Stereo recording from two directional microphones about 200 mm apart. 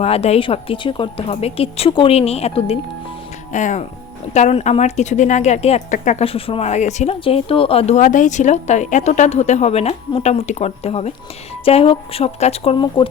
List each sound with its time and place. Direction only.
0.0 s speech: 30° left (ahead or behind)